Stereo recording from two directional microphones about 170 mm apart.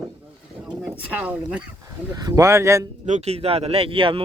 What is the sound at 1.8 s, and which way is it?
Speech, 20° right (ahead or behind).